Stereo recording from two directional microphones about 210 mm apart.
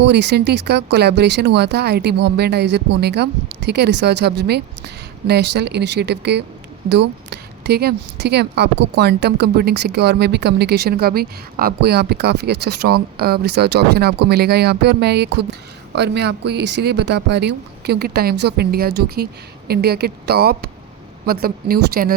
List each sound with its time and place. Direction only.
0.0 s a woman's voice: 55° right (ahead or behind)